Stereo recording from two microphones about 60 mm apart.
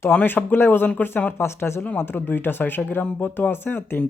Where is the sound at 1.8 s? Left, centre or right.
Left.